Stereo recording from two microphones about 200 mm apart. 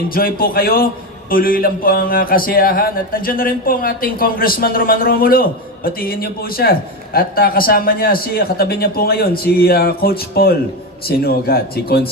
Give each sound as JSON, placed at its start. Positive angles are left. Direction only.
{"t": 0.1, "sound": "speech", "side_deg": 45}